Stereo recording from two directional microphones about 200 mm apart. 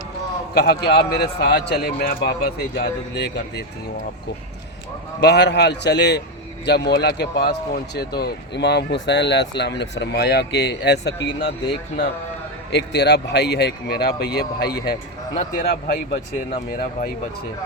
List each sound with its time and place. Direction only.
0.5 s speech: 55° left (ahead or behind)
5.2 s speech: 55° left (ahead or behind)
12.7 s speech: 55° left (ahead or behind)